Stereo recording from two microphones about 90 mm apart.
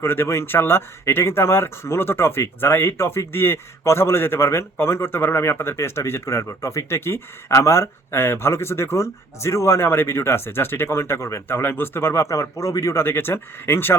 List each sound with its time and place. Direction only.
0.0 s speech: 25° left (ahead or behind)